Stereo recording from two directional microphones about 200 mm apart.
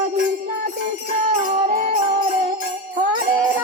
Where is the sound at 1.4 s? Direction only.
35° right (ahead or behind).